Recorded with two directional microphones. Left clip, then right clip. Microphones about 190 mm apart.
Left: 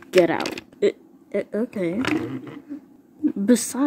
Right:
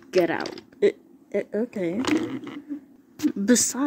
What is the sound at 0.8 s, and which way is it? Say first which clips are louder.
Speech: even; 5° right (ahead or behind).